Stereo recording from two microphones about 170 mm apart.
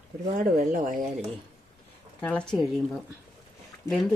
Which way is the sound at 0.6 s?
50° right (ahead or behind).